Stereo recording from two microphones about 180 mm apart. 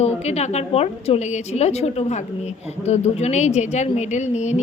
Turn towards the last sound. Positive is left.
turn(degrees=40)  # may be behind; listen again after turning